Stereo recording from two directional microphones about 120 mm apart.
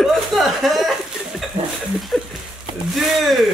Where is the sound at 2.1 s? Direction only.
Centre (ahead or behind).